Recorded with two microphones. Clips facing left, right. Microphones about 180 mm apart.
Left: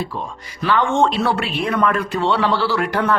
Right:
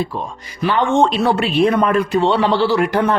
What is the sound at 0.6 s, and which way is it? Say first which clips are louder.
Speech: right 2 dB; 20° right (ahead or behind).